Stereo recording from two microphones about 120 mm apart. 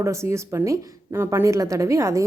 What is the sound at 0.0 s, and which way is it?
A woman's voice, 25° right (ahead or behind).